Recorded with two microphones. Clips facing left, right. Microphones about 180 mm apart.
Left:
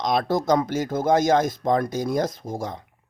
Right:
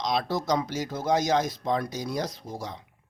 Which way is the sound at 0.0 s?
50° left (ahead or behind).